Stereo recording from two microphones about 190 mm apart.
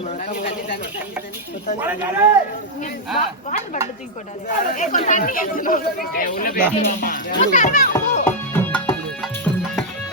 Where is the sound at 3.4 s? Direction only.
40° left (ahead or behind).